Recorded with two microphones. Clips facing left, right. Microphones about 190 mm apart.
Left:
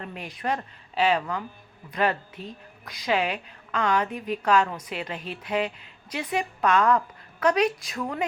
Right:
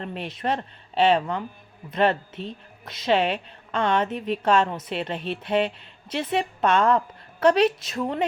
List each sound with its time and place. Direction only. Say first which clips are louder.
0.2 s a woman's voice: right 2 dB; 25° right (ahead or behind)